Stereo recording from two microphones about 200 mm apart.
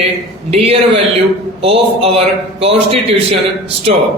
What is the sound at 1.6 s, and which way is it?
A man's voice, 30° right (ahead or behind).